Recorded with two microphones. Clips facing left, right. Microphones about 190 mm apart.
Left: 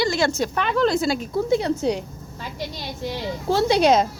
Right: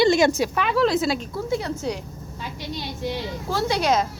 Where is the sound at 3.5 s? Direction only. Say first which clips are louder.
Left 5 dB; 25° left (ahead or behind).